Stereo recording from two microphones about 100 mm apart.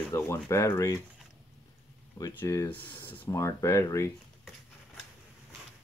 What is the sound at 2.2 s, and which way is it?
Speech, 25° left (ahead or behind).